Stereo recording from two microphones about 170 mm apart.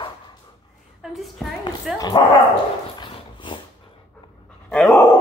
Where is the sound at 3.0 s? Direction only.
30° left (ahead or behind).